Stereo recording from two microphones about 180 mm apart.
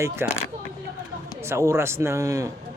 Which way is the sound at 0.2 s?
15° right (ahead or behind).